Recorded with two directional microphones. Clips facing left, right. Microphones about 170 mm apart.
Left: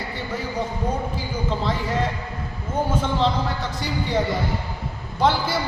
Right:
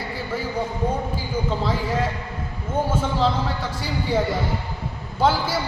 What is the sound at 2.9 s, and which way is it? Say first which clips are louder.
Speech: left 1 dB; 5° right (ahead or behind).